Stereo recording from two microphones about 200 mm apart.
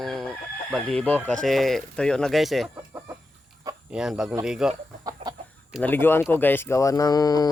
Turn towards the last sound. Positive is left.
turn(degrees=20)  # may be behind; listen again after turning